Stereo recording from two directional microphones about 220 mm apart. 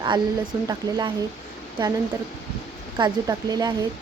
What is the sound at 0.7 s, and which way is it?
Speech, 15° right (ahead or behind).